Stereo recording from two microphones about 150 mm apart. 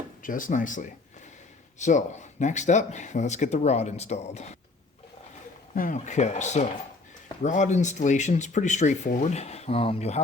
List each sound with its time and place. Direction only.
0.2 s speech: 65° left (ahead or behind); by 4.5 s 45° left (ahead or behind)
5.7 s speech: 60° left (ahead or behind); by 10.2 s 45° left (ahead or behind)